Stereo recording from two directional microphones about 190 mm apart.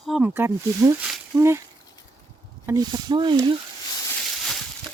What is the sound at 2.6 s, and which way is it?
Speech, 20° right (ahead or behind).